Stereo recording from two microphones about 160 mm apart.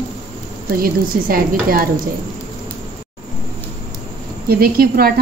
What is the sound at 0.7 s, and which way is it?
A woman's voice, 65° right (ahead or behind).